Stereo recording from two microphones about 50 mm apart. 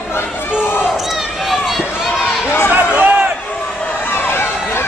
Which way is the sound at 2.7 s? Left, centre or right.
Right.